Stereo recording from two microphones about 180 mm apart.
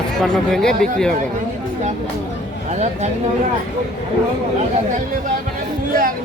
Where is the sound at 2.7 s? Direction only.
40° right (ahead or behind).